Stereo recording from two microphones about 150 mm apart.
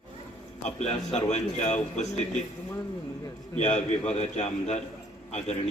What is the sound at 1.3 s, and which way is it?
Speech, 50° left (ahead or behind).